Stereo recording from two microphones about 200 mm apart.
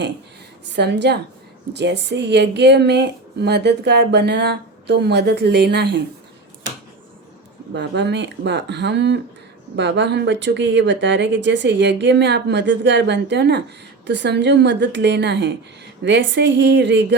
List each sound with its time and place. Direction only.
0.7 s speech: 60° right (ahead or behind)
7.7 s speech: 65° right (ahead or behind)